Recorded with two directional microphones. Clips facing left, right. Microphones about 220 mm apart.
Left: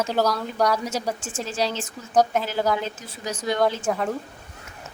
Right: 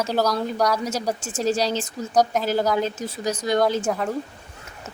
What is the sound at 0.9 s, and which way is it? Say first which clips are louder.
A woman's voice: right 2 dB; 40° right (ahead or behind).